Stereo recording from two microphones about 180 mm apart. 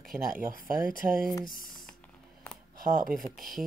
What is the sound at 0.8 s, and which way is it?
Speech, 50° right (ahead or behind).